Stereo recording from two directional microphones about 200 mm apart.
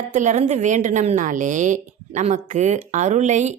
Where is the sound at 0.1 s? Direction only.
35° right (ahead or behind).